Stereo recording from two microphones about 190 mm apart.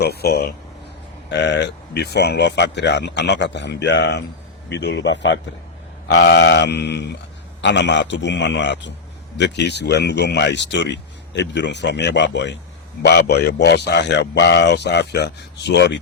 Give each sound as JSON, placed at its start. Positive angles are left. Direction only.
{"t": 0.0, "sound": "speech", "side_deg": 55}
{"t": 1.3, "sound": "a man's voice", "side_deg": 65}